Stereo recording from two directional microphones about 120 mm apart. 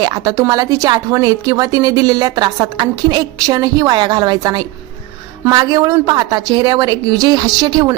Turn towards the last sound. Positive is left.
turn(degrees=-35)  # may be behind; listen again after turning